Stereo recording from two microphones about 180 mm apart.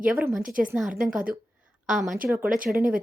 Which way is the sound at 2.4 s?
50° right (ahead or behind).